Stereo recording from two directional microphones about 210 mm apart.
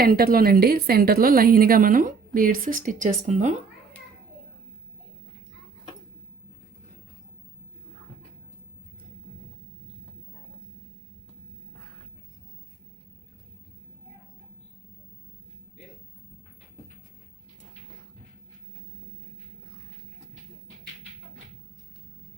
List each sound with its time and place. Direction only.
0.0 s a woman's voice: 45° right (ahead or behind)